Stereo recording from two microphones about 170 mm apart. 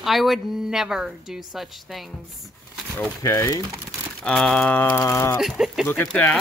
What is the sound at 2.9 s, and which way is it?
Speech, 15° left (ahead or behind).